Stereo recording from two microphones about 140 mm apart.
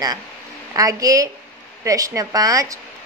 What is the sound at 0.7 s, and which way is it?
A woman's voice, 25° right (ahead or behind).